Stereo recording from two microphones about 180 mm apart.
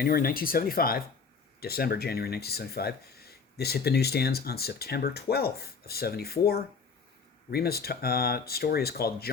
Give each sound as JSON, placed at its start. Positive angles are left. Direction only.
{"t": 0.0, "sound": "speech", "side_deg": 55}